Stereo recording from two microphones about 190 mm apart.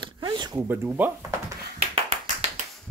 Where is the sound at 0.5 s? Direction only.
10° right (ahead or behind).